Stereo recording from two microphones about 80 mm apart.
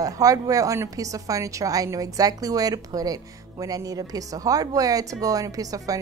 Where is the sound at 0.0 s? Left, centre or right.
Right.